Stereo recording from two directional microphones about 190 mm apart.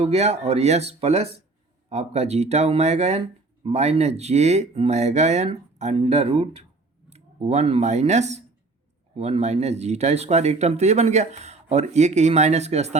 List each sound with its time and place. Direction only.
0.0 s speech: 35° right (ahead or behind)